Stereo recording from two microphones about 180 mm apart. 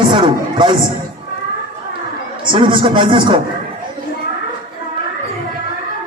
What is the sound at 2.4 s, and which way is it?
Speech, 25° right (ahead or behind).